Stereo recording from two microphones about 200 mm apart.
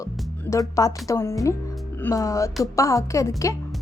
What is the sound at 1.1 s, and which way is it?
Music, 15° left (ahead or behind).